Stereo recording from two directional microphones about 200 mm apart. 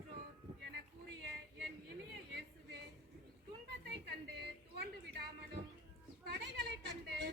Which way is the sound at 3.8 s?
55° right (ahead or behind).